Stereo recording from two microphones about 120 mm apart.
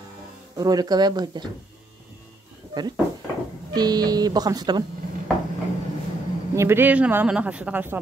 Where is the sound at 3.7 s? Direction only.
35° right (ahead or behind).